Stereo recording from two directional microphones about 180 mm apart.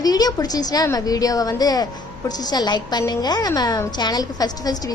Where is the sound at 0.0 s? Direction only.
20° left (ahead or behind).